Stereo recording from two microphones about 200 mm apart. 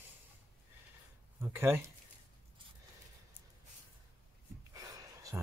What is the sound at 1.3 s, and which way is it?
Speech, 10° right (ahead or behind).